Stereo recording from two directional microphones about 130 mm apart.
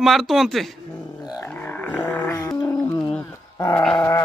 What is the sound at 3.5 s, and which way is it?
Dog, 30° left (ahead or behind).